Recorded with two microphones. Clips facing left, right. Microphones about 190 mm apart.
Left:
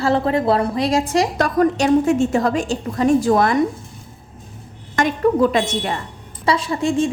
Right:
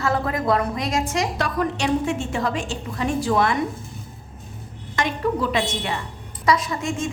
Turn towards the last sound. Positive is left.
turn(degrees=30)  # may be behind; listen again after turning